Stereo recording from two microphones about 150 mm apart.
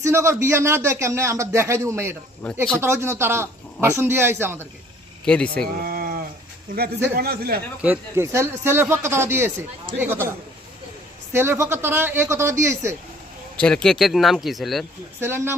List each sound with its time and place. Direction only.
0.0 s a man's voice: 20° right (ahead or behind)
5.2 s speech: 5° left (ahead or behind)
5.8 s a sound: 80° right
7.2 s a man's voice: 90° right
7.8 s speech: 15° right (ahead or behind)
11.3 s speech: 15° right (ahead or behind)
13.6 s speech: 5° left (ahead or behind)
15.2 s speech: 15° right (ahead or behind)